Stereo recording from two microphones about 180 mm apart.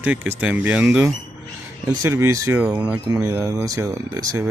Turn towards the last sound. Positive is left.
turn(degrees=-20)  # may be behind; listen again after turning